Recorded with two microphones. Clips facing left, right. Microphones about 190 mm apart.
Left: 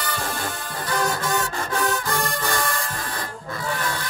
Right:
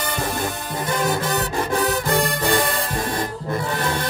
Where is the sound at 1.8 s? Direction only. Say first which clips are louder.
Right 3 dB; 55° right (ahead or behind).